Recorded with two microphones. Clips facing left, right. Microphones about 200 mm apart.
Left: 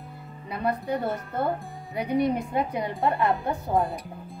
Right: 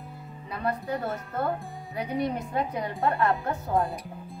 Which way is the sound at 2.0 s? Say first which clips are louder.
Left 5 dB; 10° left (ahead or behind).